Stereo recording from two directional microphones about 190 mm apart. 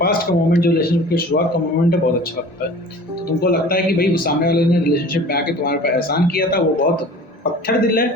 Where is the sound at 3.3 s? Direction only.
50° left (ahead or behind).